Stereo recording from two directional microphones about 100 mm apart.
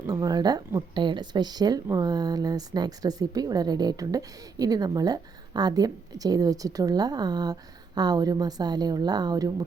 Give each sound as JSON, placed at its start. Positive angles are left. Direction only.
{"t": 0.1, "sound": "speech", "side_deg": -40}